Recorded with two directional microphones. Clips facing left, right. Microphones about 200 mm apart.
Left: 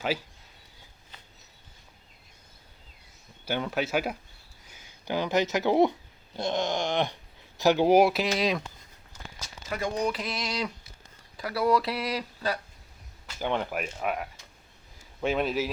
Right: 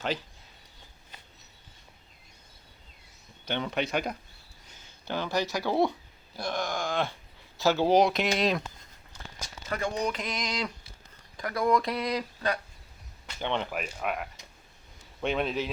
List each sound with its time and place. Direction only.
3.4 s speech: 5° left (ahead or behind)
6.3 s a sound: 20° left (ahead or behind)
7.6 s speech: 15° left (ahead or behind); by 8.6 s centre (ahead or behind)
9.6 s speech: 10° left (ahead or behind)